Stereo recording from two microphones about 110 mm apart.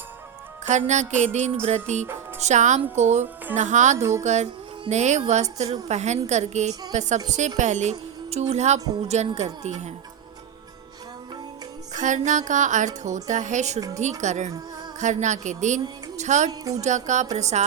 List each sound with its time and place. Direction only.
0.7 s a woman's voice: 90° right
3.9 s music: 25° right (ahead or behind)
4.2 s a woman's voice: 90° right
9.0 s a woman's voice: 75° right (ahead or behind)
12.1 s a woman's voice: 90° right
13.7 s music: 30° right (ahead or behind)
14.0 s a woman's voice: 90° right
16.5 s music: 35° right (ahead or behind)
16.8 s a woman's voice: 90° right